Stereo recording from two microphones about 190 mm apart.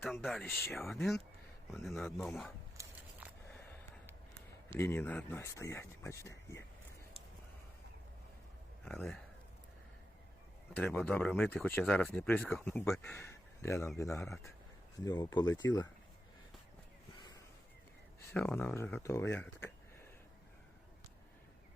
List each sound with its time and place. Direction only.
0.4 s speech: 10° left (ahead or behind)
0.7 s a man's voice: centre (ahead or behind)
2.7 s a sound: 10° right (ahead or behind)
4.4 s speech: 10° left (ahead or behind)
8.8 s speech: 5° left (ahead or behind)
10.8 s speech: 10° left (ahead or behind)
18.3 s speech: 10° left (ahead or behind)